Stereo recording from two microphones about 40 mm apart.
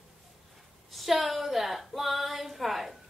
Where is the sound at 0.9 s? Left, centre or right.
Centre.